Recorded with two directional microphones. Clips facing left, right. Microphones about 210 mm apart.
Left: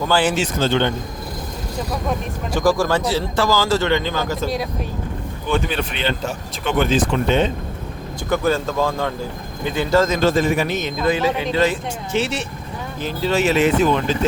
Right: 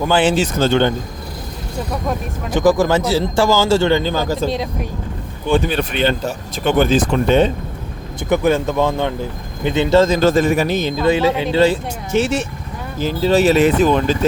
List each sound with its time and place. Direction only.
0.0 s speech: 20° right (ahead or behind)
0.3 s a man's voice: 45° right (ahead or behind)
2.5 s speech: 20° right (ahead or behind)
5.5 s a man's voice: 35° right (ahead or behind)
8.3 s speech: 15° right (ahead or behind)
10.2 s a man's voice: 45° right (ahead or behind)
12.1 s speech: 45° right (ahead or behind)
13.0 s a man's voice: 35° right (ahead or behind)